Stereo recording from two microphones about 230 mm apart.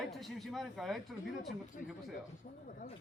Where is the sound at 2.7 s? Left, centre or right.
Left.